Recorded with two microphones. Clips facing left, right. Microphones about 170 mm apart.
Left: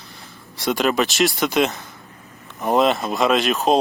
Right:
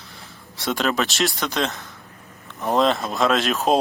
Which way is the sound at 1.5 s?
15° left (ahead or behind).